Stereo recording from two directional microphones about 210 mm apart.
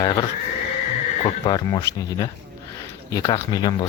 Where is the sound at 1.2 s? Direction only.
20° left (ahead or behind).